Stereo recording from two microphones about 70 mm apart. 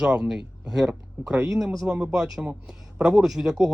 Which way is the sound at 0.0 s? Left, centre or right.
Centre.